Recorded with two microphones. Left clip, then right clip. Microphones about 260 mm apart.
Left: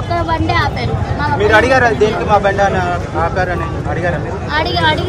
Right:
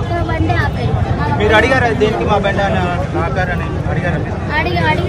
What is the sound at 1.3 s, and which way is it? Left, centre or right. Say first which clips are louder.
Speech: left 2 dB; left.